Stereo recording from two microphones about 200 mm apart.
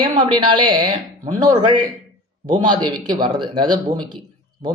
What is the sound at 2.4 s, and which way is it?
A man's voice, 25° right (ahead or behind).